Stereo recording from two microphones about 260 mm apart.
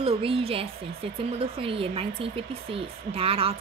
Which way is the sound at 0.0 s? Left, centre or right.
Right.